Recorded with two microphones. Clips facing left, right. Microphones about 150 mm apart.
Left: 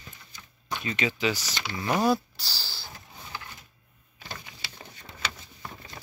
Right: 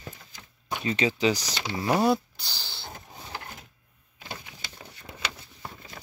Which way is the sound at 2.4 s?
20° right (ahead or behind).